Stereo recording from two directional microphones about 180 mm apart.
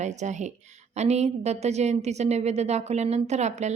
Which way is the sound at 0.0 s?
40° right (ahead or behind).